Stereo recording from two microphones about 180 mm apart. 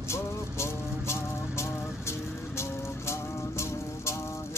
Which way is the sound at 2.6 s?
15° left (ahead or behind).